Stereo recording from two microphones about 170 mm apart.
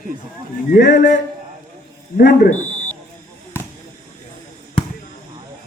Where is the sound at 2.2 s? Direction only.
60° left (ahead or behind).